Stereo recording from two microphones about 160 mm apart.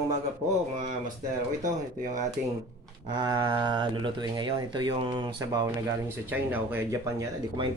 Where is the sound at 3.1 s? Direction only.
25° right (ahead or behind).